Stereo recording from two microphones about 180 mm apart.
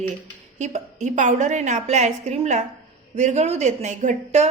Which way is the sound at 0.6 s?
40° right (ahead or behind).